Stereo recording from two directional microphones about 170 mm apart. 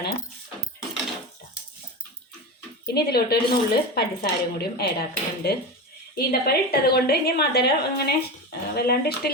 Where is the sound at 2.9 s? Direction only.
70° left (ahead or behind).